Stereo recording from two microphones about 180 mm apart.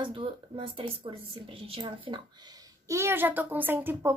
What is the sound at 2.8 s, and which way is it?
A child's voice, 15° right (ahead or behind).